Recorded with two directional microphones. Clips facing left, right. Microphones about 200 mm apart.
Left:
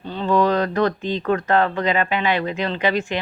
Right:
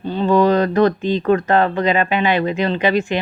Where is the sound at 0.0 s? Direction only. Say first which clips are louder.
Right 4 dB; 15° right (ahead or behind).